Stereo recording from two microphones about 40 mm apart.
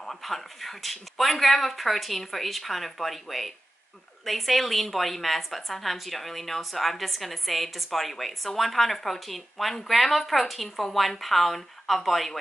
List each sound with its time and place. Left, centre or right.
0.0 s a woman's voice: centre